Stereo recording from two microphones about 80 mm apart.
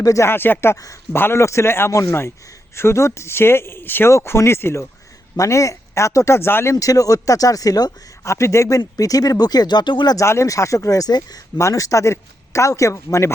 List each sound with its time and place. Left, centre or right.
0.0 s speech: left
0.3 s speech: left
6.7 s speech: left
8.2 s speech: left
10.2 s speech: left
11.5 s speech: left